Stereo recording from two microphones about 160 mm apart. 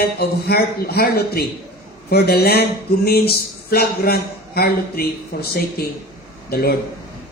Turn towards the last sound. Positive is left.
turn(degrees=75)  # may be behind; listen again after turning